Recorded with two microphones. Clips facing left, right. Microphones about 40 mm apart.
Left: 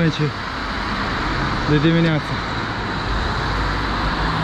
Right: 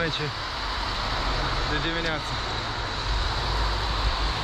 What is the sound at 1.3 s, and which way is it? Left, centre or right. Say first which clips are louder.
Vehicle: left 8 dB; left.